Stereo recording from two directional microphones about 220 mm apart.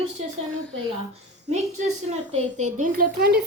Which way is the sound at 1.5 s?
30° right (ahead or behind).